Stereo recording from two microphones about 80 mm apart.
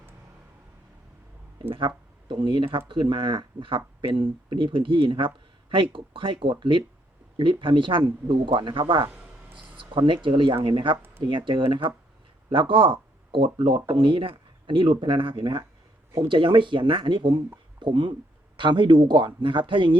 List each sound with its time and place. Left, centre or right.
2.2 s speech: right